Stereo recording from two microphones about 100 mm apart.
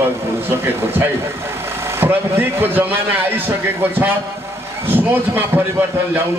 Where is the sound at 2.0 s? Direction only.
20° right (ahead or behind).